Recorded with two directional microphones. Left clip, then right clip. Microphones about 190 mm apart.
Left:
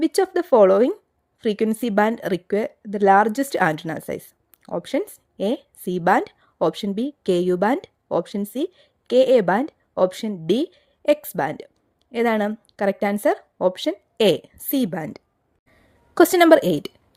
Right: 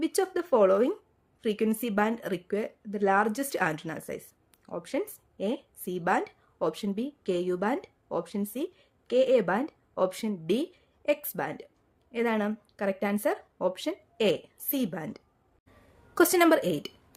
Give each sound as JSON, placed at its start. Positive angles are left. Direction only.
{"t": 0.0, "sound": "a woman's voice", "side_deg": 40}